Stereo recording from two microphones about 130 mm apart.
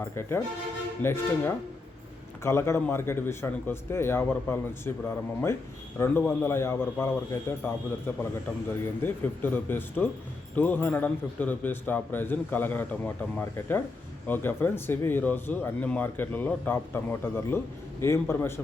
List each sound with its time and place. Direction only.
0.2 s a man's voice: 20° left (ahead or behind)
2.4 s a man's voice: 20° left (ahead or behind)